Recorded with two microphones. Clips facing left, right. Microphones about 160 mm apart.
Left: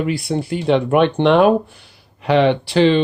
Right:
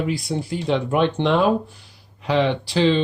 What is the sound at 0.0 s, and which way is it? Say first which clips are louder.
Speech: left 4 dB; 65° left (ahead or behind).